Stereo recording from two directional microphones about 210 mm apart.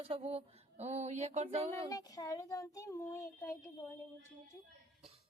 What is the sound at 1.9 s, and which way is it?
Speech, 15° left (ahead or behind).